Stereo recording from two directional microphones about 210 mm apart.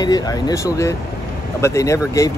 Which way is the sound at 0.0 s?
20° left (ahead or behind).